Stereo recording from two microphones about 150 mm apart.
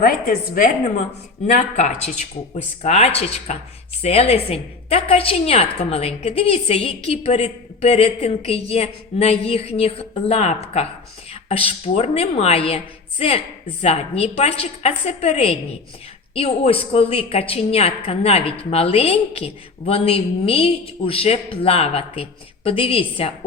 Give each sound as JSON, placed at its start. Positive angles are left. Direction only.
{"t": 0.0, "sound": "a woman's voice", "side_deg": 70}
{"t": 1.5, "sound": "a woman's voice", "side_deg": 50}